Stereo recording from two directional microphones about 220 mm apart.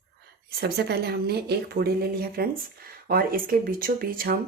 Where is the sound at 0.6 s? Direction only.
45° right (ahead or behind).